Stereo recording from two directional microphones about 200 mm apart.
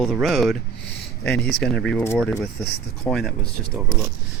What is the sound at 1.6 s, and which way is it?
Speech, 5° left (ahead or behind).